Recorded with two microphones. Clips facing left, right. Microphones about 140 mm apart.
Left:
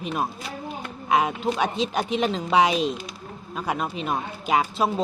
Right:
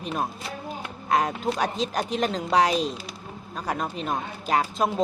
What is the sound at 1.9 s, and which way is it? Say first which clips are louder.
Speech: left 2 dB; centre (ahead or behind).